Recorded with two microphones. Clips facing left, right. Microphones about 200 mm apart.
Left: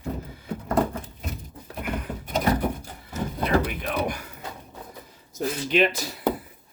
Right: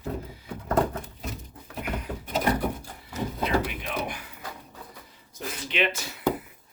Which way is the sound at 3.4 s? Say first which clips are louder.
Left 4 dB; 50° left (ahead or behind).